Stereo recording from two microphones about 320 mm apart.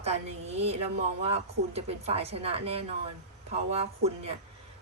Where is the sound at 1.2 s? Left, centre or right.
Centre.